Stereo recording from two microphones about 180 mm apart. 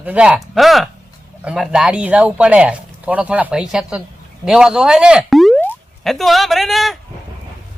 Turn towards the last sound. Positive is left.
turn(degrees=0)  # may be behind; listen again after turning